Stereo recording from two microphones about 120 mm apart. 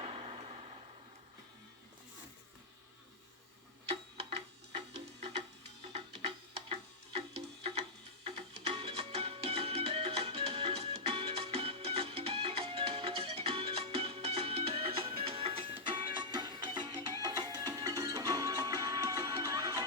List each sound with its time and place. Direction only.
0.0 s vehicle: 55° right (ahead or behind)
3.8 s tick-tock: 60° right (ahead or behind)
5.9 s music: 55° right (ahead or behind); by 19.8 s 30° right (ahead or behind)